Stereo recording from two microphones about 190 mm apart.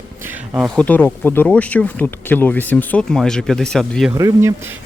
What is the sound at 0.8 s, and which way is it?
Speech, 10° left (ahead or behind).